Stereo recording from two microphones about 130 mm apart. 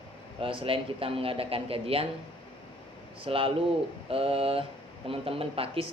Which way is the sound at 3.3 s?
45° right (ahead or behind).